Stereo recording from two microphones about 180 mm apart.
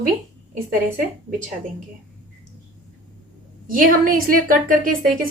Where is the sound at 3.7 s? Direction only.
50° right (ahead or behind).